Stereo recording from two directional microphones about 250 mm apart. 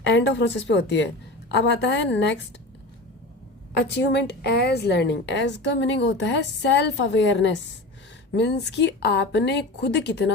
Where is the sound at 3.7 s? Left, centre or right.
Left.